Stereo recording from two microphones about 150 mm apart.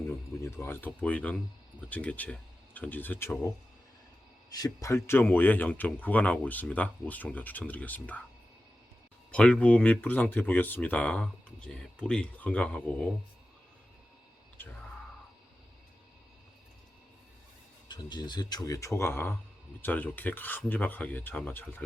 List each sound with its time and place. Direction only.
0.4 s speech: 20° left (ahead or behind)
9.3 s speech: 10° left (ahead or behind)
17.8 s speech: 30° left (ahead or behind); by 21.8 s 10° left (ahead or behind)